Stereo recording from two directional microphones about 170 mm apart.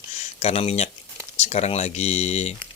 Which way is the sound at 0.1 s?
40° left (ahead or behind).